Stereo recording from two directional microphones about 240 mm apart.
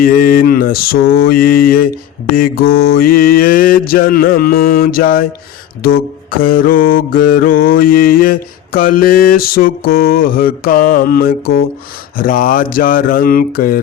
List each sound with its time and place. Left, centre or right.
0.0 s mantra: left